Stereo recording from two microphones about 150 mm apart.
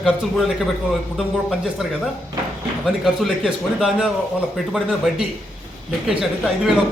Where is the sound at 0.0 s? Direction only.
Centre (ahead or behind).